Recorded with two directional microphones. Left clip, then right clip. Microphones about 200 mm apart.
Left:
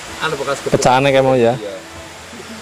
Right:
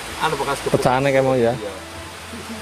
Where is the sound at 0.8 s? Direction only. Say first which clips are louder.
Left 6 dB; 20° left (ahead or behind).